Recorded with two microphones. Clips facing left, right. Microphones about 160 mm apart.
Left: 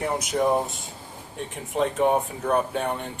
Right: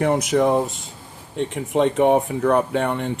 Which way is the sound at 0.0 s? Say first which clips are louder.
Right 6 dB; 85° right.